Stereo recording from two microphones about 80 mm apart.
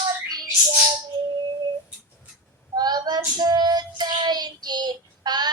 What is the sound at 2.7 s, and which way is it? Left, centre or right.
Child singing, right.